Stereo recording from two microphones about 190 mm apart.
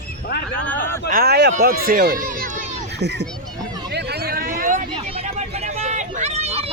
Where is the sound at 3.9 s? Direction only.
55° right (ahead or behind).